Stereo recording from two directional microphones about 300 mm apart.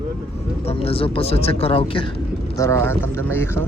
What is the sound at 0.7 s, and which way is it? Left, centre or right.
A man's voice, centre.